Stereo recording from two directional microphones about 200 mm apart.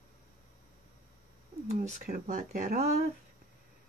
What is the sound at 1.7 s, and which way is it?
Speech, 35° right (ahead or behind).